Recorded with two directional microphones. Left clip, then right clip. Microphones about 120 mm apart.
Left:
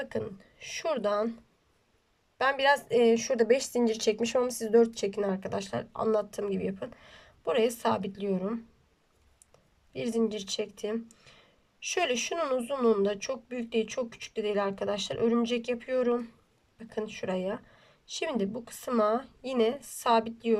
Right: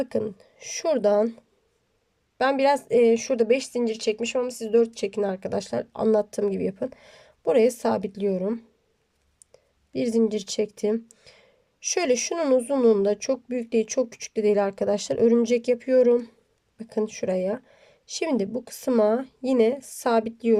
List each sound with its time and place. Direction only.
0.0 s speech: 50° right (ahead or behind)
2.4 s a woman's voice: 35° right (ahead or behind); by 5.2 s 20° right (ahead or behind)
5.2 s speech: 40° right (ahead or behind)